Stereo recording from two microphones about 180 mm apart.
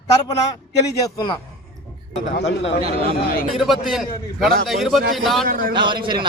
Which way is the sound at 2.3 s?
75° left (ahead or behind).